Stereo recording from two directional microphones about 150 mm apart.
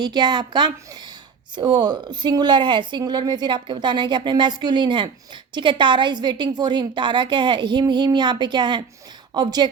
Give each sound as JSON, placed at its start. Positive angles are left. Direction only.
{"t": 0.0, "sound": "a woman's voice", "side_deg": -30}